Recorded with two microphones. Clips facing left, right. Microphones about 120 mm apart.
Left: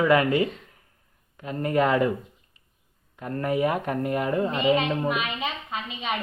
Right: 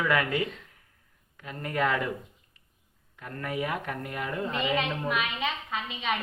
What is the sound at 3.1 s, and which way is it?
A woman's voice, 30° left (ahead or behind).